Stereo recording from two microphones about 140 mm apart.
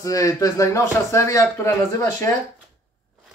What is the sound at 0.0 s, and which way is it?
Speech, 25° left (ahead or behind).